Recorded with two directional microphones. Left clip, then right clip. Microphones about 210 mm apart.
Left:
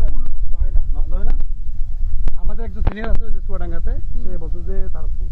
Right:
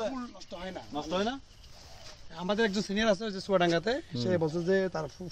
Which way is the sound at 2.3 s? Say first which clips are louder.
Right 9 dB; 40° right (ahead or behind).